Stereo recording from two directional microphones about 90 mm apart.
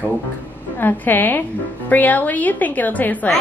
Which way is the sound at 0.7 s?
20° left (ahead or behind).